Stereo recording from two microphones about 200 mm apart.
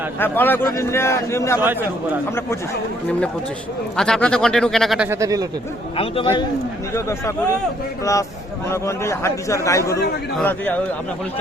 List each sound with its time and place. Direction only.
0.2 s a man's voice: 10° left (ahead or behind)
3.9 s speech: 5° left (ahead or behind)
5.0 s speech: 15° right (ahead or behind)
6.0 s a man's voice: 25° left (ahead or behind)
6.9 s a man's voice: 15° left (ahead or behind)
8.7 s a man's voice: 15° left (ahead or behind)